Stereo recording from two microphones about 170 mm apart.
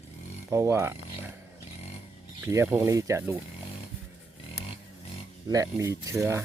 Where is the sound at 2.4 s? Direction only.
15° right (ahead or behind).